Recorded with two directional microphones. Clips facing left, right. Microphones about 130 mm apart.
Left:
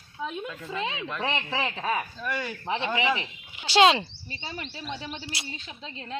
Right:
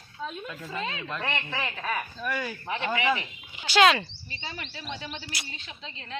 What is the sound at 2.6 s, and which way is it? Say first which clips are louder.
Speech: left 1 dB; 25° left (ahead or behind).